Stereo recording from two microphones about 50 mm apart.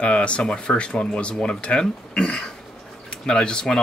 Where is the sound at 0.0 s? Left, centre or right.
Left.